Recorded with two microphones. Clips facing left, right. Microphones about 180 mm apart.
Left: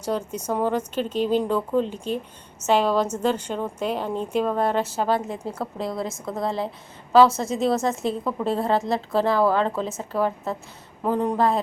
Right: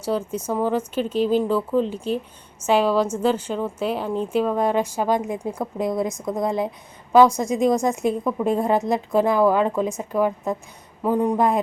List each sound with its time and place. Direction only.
0.0 s a woman's voice: 10° right (ahead or behind)